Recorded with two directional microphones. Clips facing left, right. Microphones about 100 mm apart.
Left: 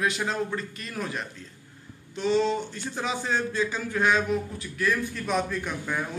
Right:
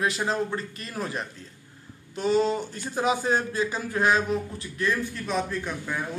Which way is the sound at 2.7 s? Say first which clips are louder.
Right 5 dB; 45° right (ahead or behind).